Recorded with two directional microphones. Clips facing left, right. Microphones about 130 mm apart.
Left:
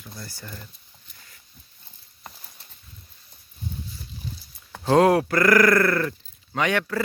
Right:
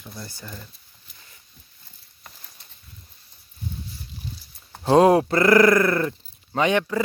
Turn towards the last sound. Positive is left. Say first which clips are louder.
# right 3 dB
turn(degrees=-20)  # may be behind; listen again after turning